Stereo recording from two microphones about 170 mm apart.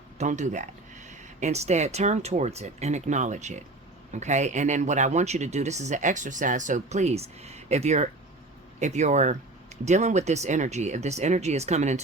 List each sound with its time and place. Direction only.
0.2 s speech: 45° right (ahead or behind)